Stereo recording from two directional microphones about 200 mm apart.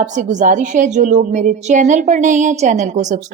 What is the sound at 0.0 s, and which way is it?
A woman's voice, 40° right (ahead or behind).